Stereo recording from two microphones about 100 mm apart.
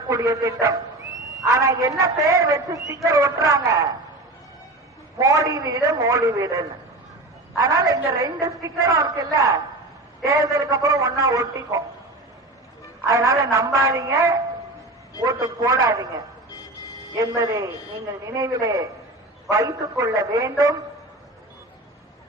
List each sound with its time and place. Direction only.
0.1 s a man's voice: 35° right (ahead or behind)
5.1 s a man's voice: 35° right (ahead or behind)
13.1 s a man's voice: 35° right (ahead or behind)
17.2 s a man's voice: 35° right (ahead or behind)